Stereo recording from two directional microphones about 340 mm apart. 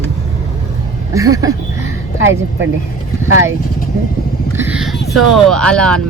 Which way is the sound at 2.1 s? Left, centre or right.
Right.